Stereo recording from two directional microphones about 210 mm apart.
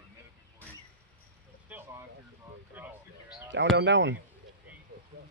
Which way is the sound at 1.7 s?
5° right (ahead or behind).